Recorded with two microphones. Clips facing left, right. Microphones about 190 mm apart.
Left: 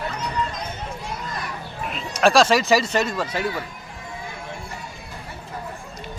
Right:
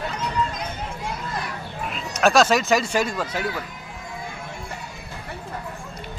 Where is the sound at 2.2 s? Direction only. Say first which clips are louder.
Left 1 dB; 5° right (ahead or behind).